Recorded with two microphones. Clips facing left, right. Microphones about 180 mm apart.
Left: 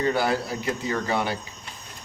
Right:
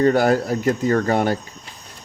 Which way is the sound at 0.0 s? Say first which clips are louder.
Right 7 dB; 50° right (ahead or behind).